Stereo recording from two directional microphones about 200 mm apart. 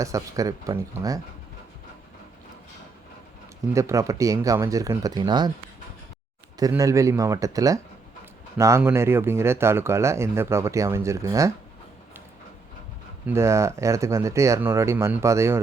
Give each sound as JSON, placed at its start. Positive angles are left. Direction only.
{"t": 0.0, "sound": "speech", "side_deg": -15}
{"t": 3.8, "sound": "speech", "side_deg": -15}
{"t": 6.6, "sound": "speech", "side_deg": -15}
{"t": 13.2, "sound": "speech", "side_deg": -15}